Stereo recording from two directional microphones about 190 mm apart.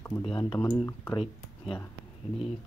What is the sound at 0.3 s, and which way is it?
Speech, 25° left (ahead or behind).